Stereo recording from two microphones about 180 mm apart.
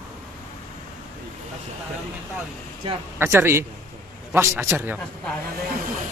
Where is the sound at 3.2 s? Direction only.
15° right (ahead or behind).